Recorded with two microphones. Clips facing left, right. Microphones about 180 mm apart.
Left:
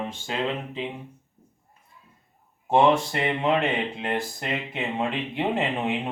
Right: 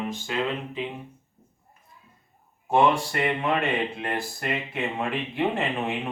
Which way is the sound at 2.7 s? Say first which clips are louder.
Left 2 dB; 25° left (ahead or behind).